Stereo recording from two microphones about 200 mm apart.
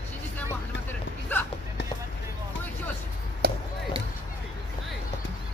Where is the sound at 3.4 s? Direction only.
50° right (ahead or behind).